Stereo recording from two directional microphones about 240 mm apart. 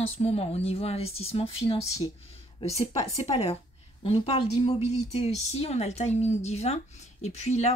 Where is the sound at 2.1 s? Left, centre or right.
Left.